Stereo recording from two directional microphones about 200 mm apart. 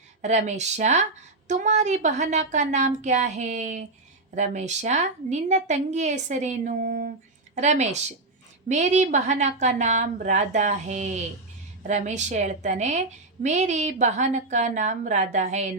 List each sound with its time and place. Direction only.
0.2 s a woman's voice: 35° right (ahead or behind)